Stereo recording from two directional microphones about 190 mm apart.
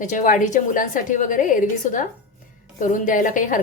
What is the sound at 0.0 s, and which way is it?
A woman's voice, 40° left (ahead or behind).